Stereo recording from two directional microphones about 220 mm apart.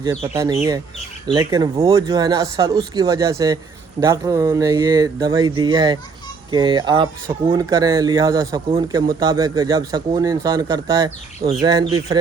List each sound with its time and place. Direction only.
0.0 s speech: 15° right (ahead or behind)